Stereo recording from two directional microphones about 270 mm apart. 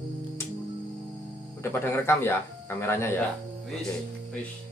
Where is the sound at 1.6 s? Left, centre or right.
Centre.